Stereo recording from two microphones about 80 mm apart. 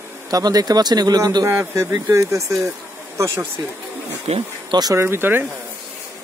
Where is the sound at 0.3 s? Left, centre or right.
Right.